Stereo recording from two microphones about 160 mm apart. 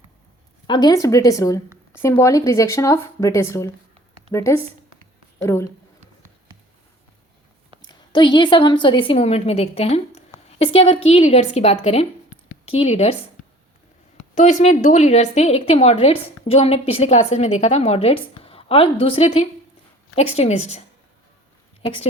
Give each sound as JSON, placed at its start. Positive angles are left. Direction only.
{"t": 0.7, "sound": "speech", "side_deg": 25}
{"t": 7.8, "sound": "a woman's voice", "side_deg": 30}
{"t": 14.3, "sound": "a woman's voice", "side_deg": 45}